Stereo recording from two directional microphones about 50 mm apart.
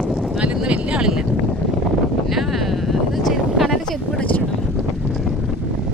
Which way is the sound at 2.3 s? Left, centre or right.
Centre.